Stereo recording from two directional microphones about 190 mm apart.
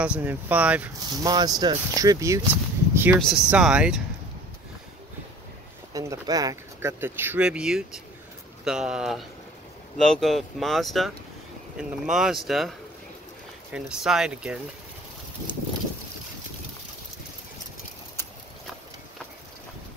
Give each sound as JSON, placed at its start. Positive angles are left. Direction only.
{"t": 0.0, "sound": "speech", "side_deg": -10}
{"t": 1.3, "sound": "speech", "side_deg": -20}
{"t": 3.2, "sound": "speech", "side_deg": 0}
{"t": 5.9, "sound": "speech", "side_deg": -20}